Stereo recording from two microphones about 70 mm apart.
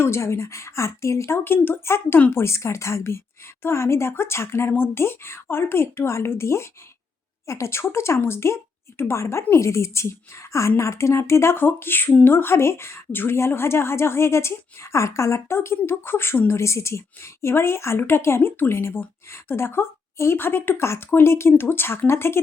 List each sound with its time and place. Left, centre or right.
0.0 s a woman's voice: left
1.5 s a woman's voice: left